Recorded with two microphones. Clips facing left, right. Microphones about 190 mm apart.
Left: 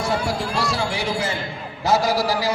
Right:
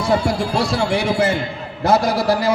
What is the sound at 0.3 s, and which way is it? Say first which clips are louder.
A man's voice: right 5 dB; 60° right (ahead or behind).